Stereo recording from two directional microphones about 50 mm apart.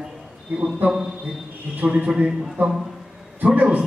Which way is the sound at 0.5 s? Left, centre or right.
Centre.